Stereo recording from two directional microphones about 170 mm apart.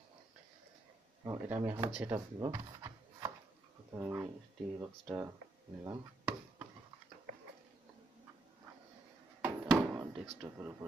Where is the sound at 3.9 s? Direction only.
10° right (ahead or behind).